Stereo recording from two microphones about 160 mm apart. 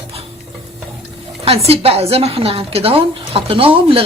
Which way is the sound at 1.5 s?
40° right (ahead or behind).